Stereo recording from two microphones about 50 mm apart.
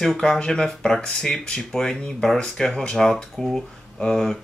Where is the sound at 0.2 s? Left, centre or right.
Centre.